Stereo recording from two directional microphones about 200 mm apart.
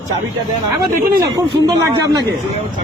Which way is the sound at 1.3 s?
20° right (ahead or behind).